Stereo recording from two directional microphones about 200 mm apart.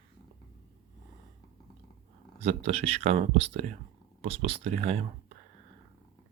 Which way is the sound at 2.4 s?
30° right (ahead or behind).